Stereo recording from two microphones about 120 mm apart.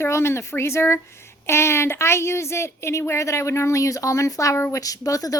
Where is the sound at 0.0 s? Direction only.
20° left (ahead or behind).